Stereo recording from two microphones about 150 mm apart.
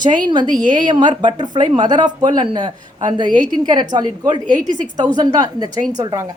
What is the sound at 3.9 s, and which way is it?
Speech, 30° right (ahead or behind).